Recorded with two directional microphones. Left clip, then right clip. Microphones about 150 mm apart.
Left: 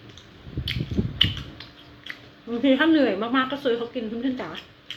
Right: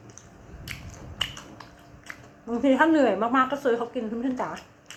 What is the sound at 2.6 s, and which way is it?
A woman's voice, 20° left (ahead or behind).